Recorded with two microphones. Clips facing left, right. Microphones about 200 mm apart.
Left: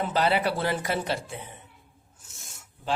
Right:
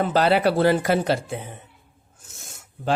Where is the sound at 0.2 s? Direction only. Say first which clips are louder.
Right 6 dB; 80° right.